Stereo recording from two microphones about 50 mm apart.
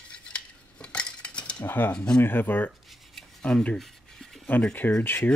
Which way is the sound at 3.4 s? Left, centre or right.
Left.